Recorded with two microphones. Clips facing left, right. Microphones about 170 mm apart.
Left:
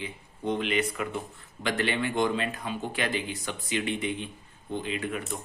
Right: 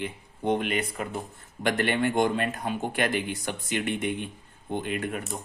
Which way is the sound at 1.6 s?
55° right (ahead or behind).